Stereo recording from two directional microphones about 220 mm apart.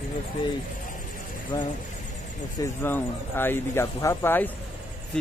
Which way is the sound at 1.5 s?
15° left (ahead or behind).